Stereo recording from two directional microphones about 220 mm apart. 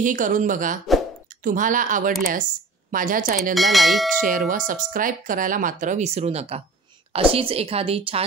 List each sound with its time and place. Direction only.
0.0 s speech: 35° right (ahead or behind)
3.5 s speech: centre (ahead or behind)
4.3 s a woman's voice: 40° right (ahead or behind)